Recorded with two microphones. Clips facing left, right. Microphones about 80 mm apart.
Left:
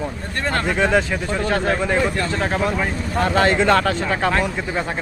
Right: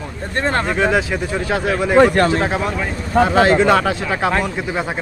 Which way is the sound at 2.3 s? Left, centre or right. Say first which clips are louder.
Right 2 dB; centre.